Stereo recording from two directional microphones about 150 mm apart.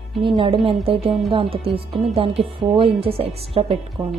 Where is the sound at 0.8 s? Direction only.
40° right (ahead or behind).